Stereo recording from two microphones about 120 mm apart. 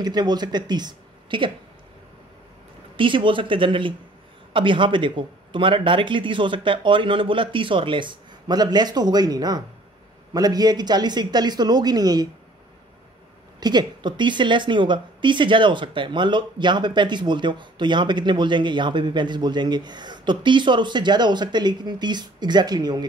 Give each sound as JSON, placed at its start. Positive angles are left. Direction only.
{"t": 0.0, "sound": "a woman's voice", "side_deg": -35}
{"t": 3.0, "sound": "a woman's voice", "side_deg": -45}
{"t": 13.6, "sound": "a woman's voice", "side_deg": -35}